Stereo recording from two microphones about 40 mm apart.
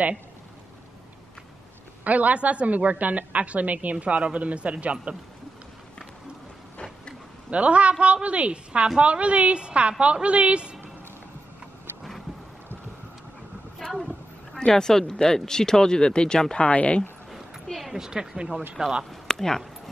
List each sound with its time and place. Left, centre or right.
2.0 s a woman's voice: right
7.5 s a woman's voice: right
13.8 s a sound: centre
14.7 s speech: centre
16.6 s speech: left
17.9 s a woman's voice: centre
19.2 s a sound: centre